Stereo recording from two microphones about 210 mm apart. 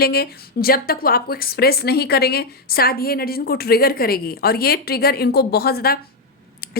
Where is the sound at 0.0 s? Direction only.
50° left (ahead or behind).